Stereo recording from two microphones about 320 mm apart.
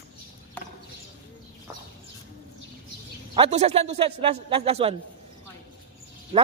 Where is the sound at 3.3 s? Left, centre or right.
Centre.